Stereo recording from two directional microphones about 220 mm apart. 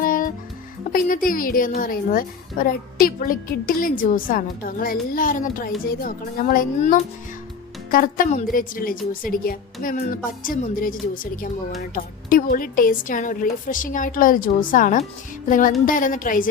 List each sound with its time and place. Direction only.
0.0 s music: 40° left (ahead or behind)
0.9 s a woman's voice: 40° left (ahead or behind)